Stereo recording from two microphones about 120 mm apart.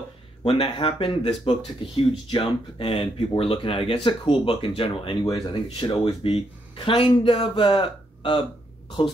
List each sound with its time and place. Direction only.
0.4 s speech: 40° left (ahead or behind)